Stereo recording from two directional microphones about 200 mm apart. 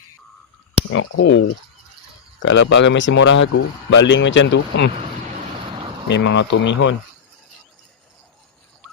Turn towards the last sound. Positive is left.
turn(degrees=65)  # may be behind; listen again after turning